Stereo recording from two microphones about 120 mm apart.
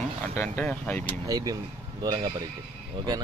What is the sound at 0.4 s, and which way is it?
Speech, 10° left (ahead or behind).